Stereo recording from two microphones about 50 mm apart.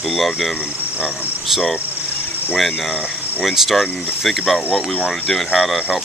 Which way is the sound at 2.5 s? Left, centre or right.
Centre.